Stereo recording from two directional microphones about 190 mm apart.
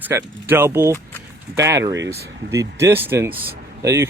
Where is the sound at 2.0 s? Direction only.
65° right (ahead or behind).